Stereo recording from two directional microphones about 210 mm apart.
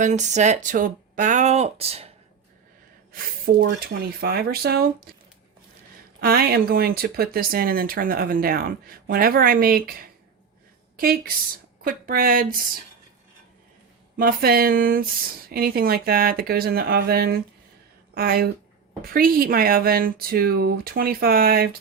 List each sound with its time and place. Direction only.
0.0 s speech: 35° right (ahead or behind)
3.1 s speech: 45° right (ahead or behind)
6.1 s speech: 45° right (ahead or behind)
14.2 s speech: 45° right (ahead or behind)